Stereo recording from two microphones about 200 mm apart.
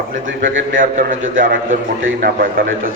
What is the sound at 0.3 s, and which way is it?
A man's voice, 70° right (ahead or behind).